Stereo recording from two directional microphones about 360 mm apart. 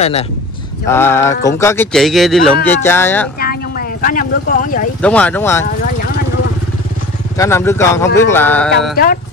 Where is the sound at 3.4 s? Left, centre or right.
Left.